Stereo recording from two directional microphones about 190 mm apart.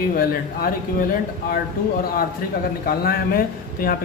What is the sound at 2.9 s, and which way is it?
Speech, 50° left (ahead or behind).